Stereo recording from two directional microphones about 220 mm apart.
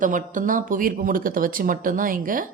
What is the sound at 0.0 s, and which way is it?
A woman's voice, 35° right (ahead or behind).